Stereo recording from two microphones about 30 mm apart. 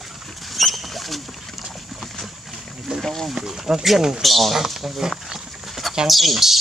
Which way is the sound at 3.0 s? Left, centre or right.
Centre.